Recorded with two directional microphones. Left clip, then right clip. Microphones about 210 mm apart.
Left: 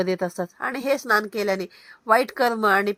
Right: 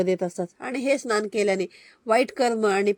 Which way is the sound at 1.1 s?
30° right (ahead or behind).